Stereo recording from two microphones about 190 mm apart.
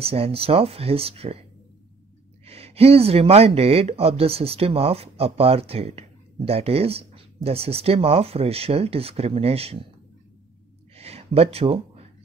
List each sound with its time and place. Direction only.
0.0 s speech: 30° right (ahead or behind)
2.4 s speech: 30° right (ahead or behind)
11.0 s a sound: 35° right (ahead or behind)